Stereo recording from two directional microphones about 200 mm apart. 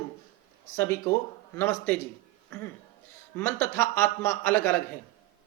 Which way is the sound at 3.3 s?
10° left (ahead or behind).